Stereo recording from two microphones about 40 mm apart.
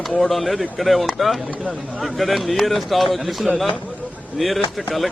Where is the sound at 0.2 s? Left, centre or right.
Centre.